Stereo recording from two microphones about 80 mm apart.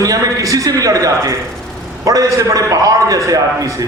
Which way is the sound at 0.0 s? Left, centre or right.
Right.